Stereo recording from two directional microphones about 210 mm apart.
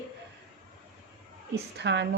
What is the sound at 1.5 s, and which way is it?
Speech, 55° right (ahead or behind).